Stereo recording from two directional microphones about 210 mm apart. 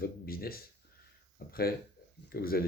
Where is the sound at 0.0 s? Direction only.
45° left (ahead or behind).